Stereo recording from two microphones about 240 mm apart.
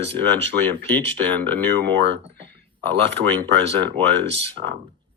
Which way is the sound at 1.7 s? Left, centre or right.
Right.